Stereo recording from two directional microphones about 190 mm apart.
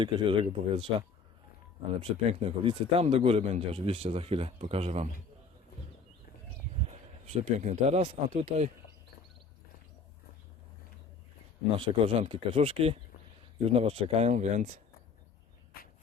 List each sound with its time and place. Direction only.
0.0 s speech: 25° right (ahead or behind)
7.3 s speech: 40° right (ahead or behind)
11.8 s speech: 30° right (ahead or behind)